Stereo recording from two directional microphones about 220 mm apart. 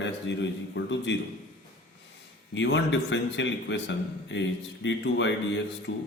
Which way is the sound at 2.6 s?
55° left (ahead or behind).